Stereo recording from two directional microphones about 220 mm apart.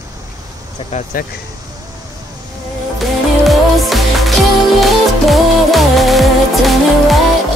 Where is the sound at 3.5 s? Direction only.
Centre (ahead or behind).